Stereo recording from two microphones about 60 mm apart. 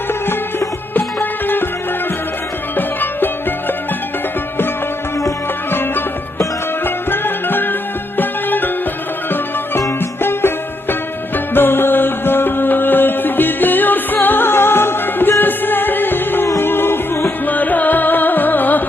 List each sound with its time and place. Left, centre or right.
0.9 s music: left
2.7 s music: left
6.8 s music: left
10.2 s music: left
17.4 s music: left